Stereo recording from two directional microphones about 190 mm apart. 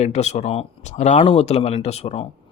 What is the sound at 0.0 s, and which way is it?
Speech, 35° left (ahead or behind).